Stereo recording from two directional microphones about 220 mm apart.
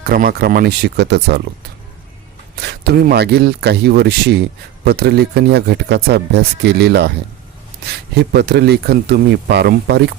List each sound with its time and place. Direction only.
0.0 s speech: 45° right (ahead or behind)
2.6 s speech: 50° right (ahead or behind)